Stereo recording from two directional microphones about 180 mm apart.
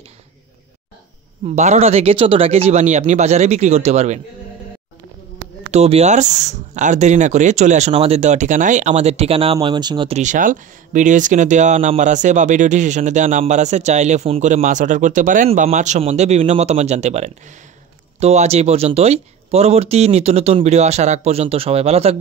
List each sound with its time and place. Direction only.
1.4 s speech: 40° right (ahead or behind)
5.7 s speech: 35° right (ahead or behind)